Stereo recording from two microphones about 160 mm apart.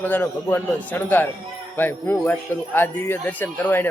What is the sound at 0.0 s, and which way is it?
Speech, 10° left (ahead or behind).